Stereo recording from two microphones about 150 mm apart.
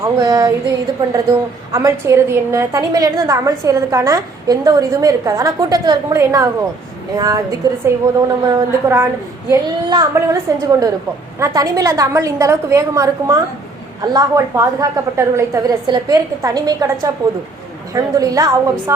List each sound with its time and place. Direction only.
0.0 s a woman's voice: 25° right (ahead or behind)